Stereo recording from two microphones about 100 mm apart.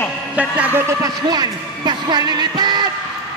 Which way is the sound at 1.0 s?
45° right (ahead or behind).